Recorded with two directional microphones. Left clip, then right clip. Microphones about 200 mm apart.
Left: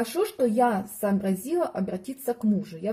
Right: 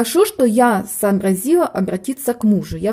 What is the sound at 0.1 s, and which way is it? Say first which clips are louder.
A woman's voice: right 12 dB; 35° right (ahead or behind).